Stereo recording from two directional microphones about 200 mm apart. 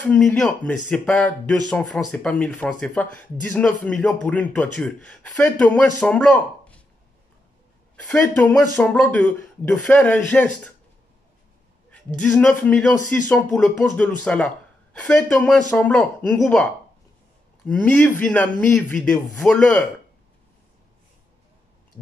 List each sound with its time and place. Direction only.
0.0 s speech: 5° left (ahead or behind)
7.9 s speech: 5° left (ahead or behind)
11.9 s speech: 5° left (ahead or behind)
17.6 s speech: 10° left (ahead or behind)